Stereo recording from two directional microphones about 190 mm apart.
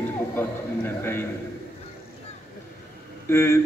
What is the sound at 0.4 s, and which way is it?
Speech, 10° left (ahead or behind).